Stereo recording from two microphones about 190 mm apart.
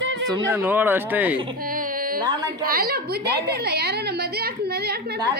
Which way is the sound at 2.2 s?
20° right (ahead or behind).